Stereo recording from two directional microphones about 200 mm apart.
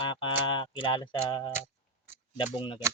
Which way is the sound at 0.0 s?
25° left (ahead or behind).